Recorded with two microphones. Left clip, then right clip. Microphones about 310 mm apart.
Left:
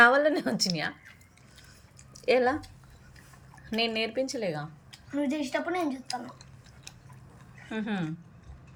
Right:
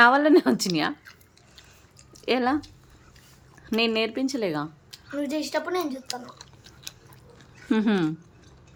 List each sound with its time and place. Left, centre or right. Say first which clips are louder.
0.0 s speech: right 4 dB; centre
2.1 s speech: even; centre